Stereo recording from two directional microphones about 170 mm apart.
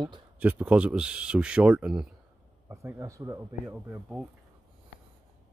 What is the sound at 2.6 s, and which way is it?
Speech, 15° right (ahead or behind).